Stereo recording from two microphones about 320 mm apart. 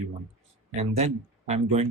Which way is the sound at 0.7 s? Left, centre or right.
Centre.